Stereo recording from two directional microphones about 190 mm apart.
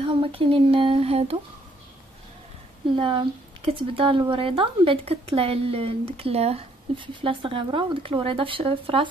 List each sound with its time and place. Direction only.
0.0 s speech: 25° right (ahead or behind)
3.0 s speech: 25° right (ahead or behind)